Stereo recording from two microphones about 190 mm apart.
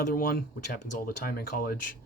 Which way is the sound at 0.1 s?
50° left (ahead or behind).